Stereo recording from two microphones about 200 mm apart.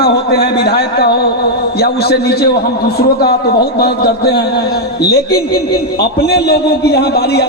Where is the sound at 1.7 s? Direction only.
50° left (ahead or behind).